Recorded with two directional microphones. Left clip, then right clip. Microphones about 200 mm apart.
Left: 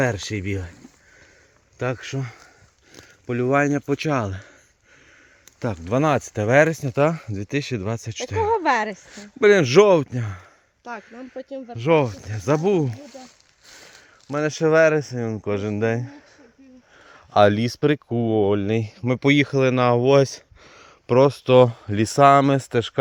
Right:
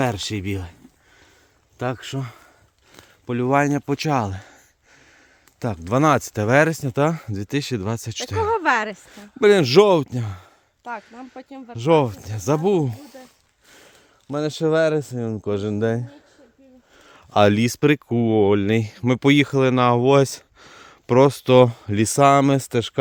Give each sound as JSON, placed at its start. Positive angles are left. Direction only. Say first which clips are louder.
{"t": 0.0, "sound": "speech", "louder": "even", "side_deg": -25}
{"t": 1.8, "sound": "speech", "louder": "even", "side_deg": -25}
{"t": 5.5, "sound": "speech", "louder": "right 1 dB", "side_deg": -30}
{"t": 8.4, "sound": "speech", "louder": "even", "side_deg": -15}
{"t": 9.0, "sound": "speech", "louder": "even", "side_deg": -30}
{"t": 11.3, "sound": "speech", "louder": "left 7 dB", "side_deg": -15}
{"t": 11.8, "sound": "speech", "louder": "right 1 dB", "side_deg": -30}
{"t": 13.2, "sound": "a sound", "louder": "left 3 dB", "side_deg": 50}
{"t": 14.3, "sound": "speech", "louder": "left 1 dB", "side_deg": -20}
{"t": 17.0, "sound": "speech", "louder": "left 1 dB", "side_deg": -40}